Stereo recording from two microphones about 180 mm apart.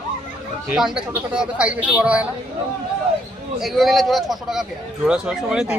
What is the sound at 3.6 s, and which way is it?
Speech, centre (ahead or behind).